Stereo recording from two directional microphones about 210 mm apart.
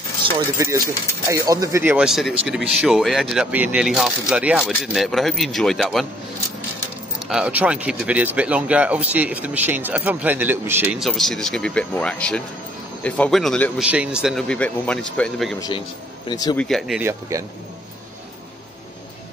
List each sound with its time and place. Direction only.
0.2 s speech: 25° right (ahead or behind); by 6.0 s centre (ahead or behind)
7.2 s speech: centre (ahead or behind)
16.3 s speech: 20° left (ahead or behind)
16.5 s speech: centre (ahead or behind)
17.3 s speech: 15° right (ahead or behind)